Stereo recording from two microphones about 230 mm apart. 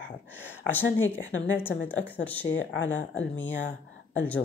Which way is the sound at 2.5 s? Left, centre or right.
Left.